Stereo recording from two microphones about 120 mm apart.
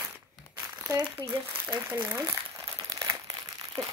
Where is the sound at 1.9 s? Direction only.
20° right (ahead or behind).